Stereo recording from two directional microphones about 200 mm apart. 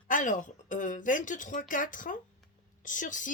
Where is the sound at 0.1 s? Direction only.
40° left (ahead or behind).